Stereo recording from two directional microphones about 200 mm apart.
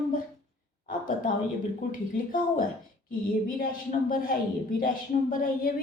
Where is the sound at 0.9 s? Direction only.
45° left (ahead or behind).